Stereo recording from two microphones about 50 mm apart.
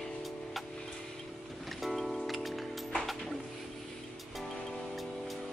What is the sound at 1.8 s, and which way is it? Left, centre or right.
Music, centre.